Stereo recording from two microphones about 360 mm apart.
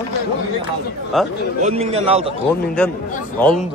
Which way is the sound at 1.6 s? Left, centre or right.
Centre.